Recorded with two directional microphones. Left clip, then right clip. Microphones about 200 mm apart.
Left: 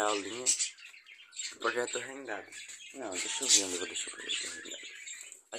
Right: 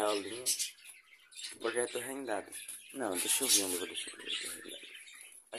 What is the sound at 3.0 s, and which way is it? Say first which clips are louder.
Speech: right 4 dB; 45° right (ahead or behind).